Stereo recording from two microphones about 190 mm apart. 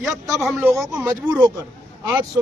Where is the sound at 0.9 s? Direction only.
15° right (ahead or behind).